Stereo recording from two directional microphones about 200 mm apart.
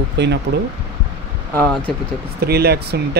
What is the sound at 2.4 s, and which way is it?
Speech, 50° right (ahead or behind).